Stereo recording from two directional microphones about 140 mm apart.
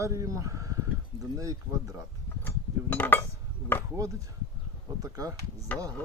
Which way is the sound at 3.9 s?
25° right (ahead or behind).